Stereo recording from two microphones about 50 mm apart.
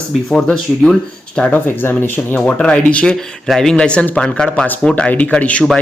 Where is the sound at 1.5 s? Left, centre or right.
Left.